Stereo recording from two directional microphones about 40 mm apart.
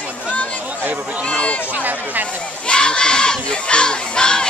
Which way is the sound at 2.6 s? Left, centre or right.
Left.